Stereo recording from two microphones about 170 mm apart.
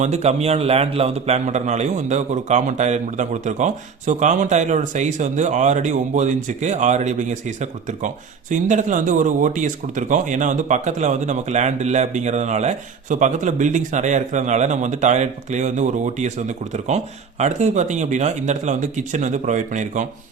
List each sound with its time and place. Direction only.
0.0 s a man's voice: 40° right (ahead or behind)